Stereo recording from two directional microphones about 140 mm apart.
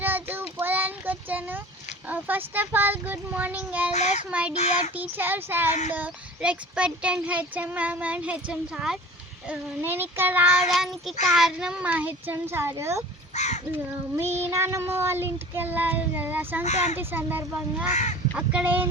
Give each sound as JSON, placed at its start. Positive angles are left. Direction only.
{"t": 0.0, "sound": "child singing", "side_deg": -15}
{"t": 3.9, "sound": "speech", "side_deg": 55}
{"t": 4.3, "sound": "child singing", "side_deg": -10}
{"t": 4.5, "sound": "speech", "side_deg": 55}
{"t": 4.9, "sound": "child singing", "side_deg": -15}
{"t": 9.5, "sound": "child singing", "side_deg": -15}
{"t": 10.7, "sound": "child singing", "side_deg": 0}
{"t": 13.3, "sound": "crow", "side_deg": 55}
{"t": 14.4, "sound": "child singing", "side_deg": -20}
{"t": 16.6, "sound": "speech", "side_deg": 55}
{"t": 17.0, "sound": "child singing", "side_deg": -15}
{"t": 17.8, "sound": "speech", "side_deg": 55}
{"t": 18.3, "sound": "child singing", "side_deg": -10}